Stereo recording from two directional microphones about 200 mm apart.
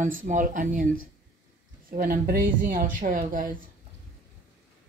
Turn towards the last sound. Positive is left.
turn(degrees=-40)  # may be behind; listen again after turning